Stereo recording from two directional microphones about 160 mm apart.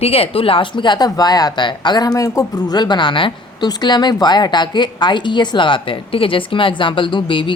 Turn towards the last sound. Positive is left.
turn(degrees=30)  # may be behind; listen again after turning